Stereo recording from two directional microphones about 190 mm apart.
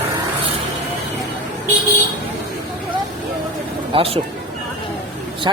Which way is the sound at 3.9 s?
30° right (ahead or behind).